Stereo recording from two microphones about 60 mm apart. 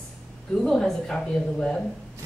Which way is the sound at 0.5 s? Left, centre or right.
Centre.